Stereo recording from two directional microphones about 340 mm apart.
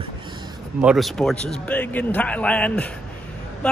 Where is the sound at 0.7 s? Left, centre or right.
Centre.